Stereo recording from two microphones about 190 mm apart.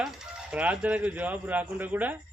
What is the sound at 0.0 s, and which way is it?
Speech, centre (ahead or behind).